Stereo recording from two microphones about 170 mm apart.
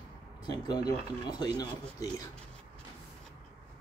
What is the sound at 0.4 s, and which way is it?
Speech, 25° left (ahead or behind).